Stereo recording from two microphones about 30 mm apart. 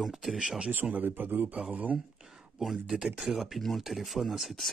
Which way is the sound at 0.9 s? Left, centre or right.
Right.